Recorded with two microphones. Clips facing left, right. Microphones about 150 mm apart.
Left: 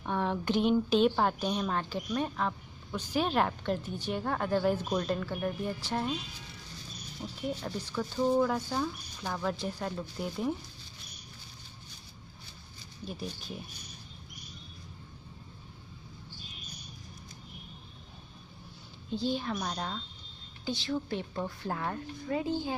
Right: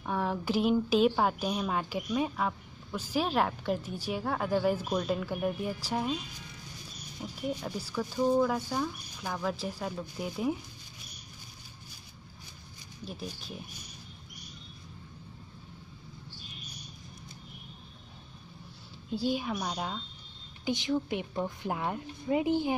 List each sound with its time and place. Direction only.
0.0 s a woman's voice: 5° right (ahead or behind)
7.2 s a woman's voice: 10° right (ahead or behind)
13.0 s a woman's voice: centre (ahead or behind)
19.0 s a woman's voice: 10° right (ahead or behind)